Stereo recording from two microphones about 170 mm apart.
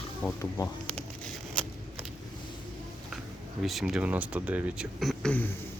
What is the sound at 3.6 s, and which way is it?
Speech, centre (ahead or behind).